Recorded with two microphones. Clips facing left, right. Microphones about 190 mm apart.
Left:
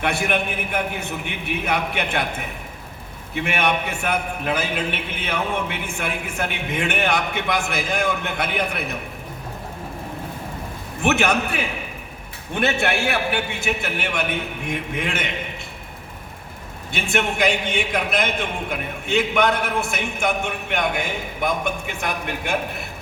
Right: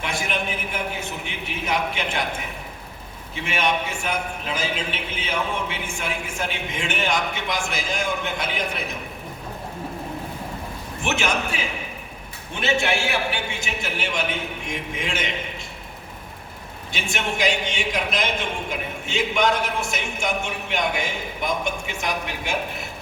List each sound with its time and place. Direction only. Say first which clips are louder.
0.0 s a man's voice: left 5 dB; 60° left (ahead or behind)
3.3 s a man's voice: left 2 dB; 60° left (ahead or behind)
11.0 s a man's voice: left 5 dB; 60° left (ahead or behind)
16.9 s a man's voice: left 4 dB; 55° left (ahead or behind)